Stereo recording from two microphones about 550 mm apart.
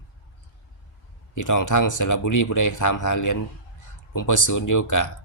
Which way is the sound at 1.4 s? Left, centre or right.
Left.